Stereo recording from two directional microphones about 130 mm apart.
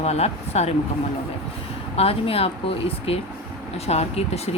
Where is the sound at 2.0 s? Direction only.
50° left (ahead or behind).